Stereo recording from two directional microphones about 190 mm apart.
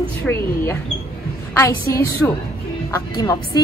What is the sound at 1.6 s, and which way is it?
A woman's voice, 15° left (ahead or behind).